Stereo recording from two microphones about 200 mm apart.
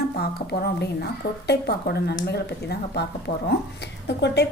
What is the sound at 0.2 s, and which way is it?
A woman's voice, 50° left (ahead or behind).